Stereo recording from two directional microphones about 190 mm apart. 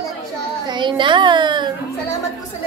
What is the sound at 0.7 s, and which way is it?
A child's voice, 25° right (ahead or behind).